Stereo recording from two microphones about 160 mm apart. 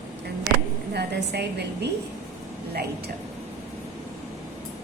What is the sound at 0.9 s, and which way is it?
Speech, 90° right.